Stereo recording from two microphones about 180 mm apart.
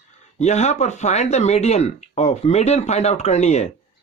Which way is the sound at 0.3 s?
40° left (ahead or behind).